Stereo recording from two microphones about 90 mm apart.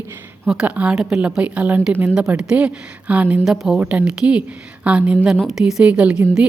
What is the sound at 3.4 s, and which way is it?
A woman's voice, 5° right (ahead or behind).